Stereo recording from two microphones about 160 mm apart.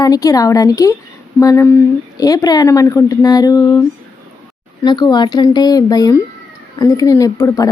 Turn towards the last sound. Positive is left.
turn(degrees=20)  # may be behind; listen again after turning